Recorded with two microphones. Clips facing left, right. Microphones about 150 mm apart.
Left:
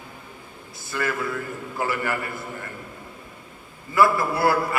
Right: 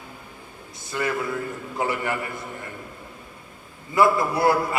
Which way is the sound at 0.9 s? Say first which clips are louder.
Right 1 dB; 20° right (ahead or behind).